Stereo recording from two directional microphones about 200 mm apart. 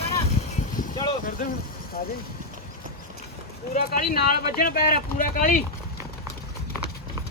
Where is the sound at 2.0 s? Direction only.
45° left (ahead or behind).